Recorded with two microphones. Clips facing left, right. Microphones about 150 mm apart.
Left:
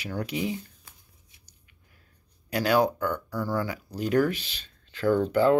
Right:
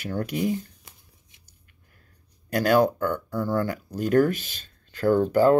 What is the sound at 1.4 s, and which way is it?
Squish, 50° right (ahead or behind).